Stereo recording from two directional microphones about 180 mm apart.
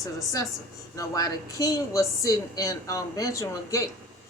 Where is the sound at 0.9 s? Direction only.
20° left (ahead or behind).